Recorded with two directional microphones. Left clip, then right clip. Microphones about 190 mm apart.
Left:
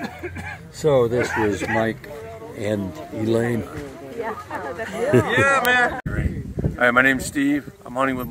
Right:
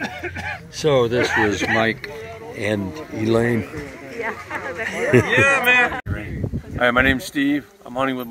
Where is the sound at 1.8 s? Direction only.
10° left (ahead or behind).